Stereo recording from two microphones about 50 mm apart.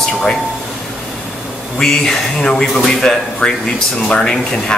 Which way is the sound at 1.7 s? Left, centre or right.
Centre.